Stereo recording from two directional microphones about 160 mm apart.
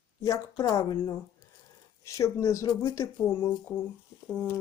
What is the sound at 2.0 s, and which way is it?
Speech, 20° left (ahead or behind).